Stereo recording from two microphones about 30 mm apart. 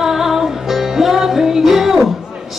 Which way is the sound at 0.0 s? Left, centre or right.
Centre.